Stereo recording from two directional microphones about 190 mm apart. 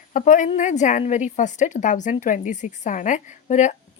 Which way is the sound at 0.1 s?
45° left (ahead or behind).